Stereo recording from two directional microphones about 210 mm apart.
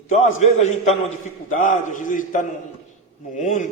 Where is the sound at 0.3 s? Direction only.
35° left (ahead or behind).